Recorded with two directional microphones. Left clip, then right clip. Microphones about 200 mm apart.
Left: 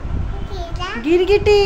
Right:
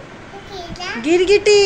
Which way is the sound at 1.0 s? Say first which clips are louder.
Right 1 dB; 10° left (ahead or behind).